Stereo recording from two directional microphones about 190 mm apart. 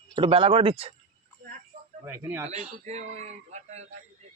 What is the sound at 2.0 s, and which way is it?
Speech, 10° right (ahead or behind).